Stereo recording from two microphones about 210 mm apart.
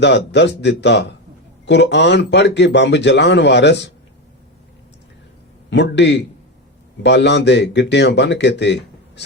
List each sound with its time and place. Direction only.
0.0 s speech: 55° left (ahead or behind)
5.7 s speech: 55° left (ahead or behind)